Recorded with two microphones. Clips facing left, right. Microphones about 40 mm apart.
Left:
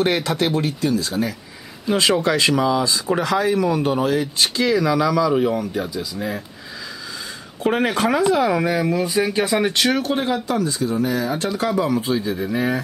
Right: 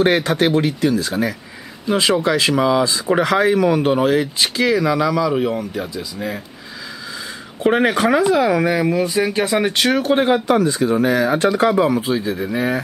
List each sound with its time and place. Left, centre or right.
0.0 s speech: right
1.9 s speech: centre
3.1 s speech: right; by 6.4 s centre
7.6 s speech: right
8.2 s speech: centre
10.0 s speech: right
11.9 s speech: centre